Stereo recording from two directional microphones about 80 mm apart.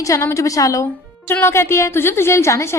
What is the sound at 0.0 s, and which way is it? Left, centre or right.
Speech, left.